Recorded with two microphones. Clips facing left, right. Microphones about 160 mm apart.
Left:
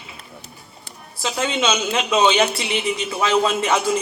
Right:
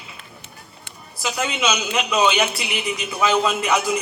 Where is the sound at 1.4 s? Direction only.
30° left (ahead or behind).